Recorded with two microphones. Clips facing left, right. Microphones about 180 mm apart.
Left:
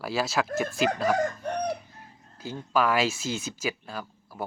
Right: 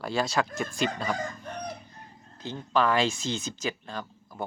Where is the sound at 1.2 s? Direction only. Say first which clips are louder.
Left 8 dB; 70° left (ahead or behind).